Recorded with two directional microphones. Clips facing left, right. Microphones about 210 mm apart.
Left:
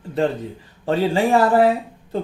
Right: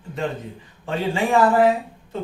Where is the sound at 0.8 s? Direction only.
35° left (ahead or behind).